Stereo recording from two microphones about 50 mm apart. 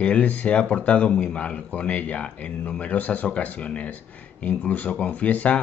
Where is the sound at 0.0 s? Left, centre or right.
Left.